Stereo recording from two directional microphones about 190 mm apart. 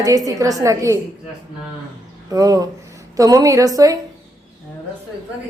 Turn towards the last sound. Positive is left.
turn(degrees=-20)  # may be behind; listen again after turning